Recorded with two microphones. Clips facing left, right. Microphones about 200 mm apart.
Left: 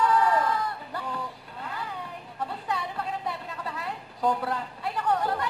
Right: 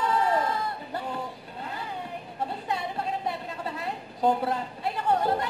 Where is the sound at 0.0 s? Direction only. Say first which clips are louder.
Left 2 dB; 25° right (ahead or behind).